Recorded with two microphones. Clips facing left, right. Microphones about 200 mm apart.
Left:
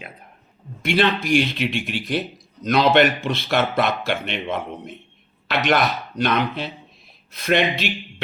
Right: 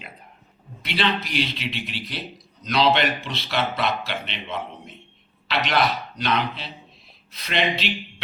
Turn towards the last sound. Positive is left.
turn(degrees=50)  # may be behind; listen again after turning